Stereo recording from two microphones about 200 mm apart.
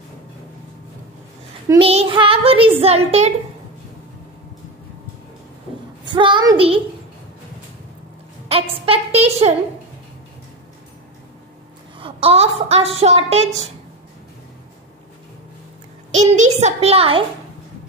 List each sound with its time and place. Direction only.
1.8 s a child's voice: 30° right (ahead or behind)
6.0 s a child's voice: 25° right (ahead or behind)
8.5 s a child's voice: 30° right (ahead or behind)
12.0 s a woman's voice: 30° right (ahead or behind)
16.2 s a woman's voice: 35° right (ahead or behind)